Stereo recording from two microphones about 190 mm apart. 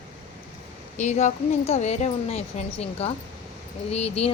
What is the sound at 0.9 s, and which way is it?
Speech, 40° left (ahead or behind).